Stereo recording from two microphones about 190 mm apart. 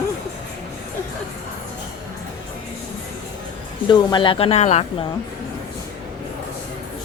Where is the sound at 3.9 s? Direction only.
25° left (ahead or behind).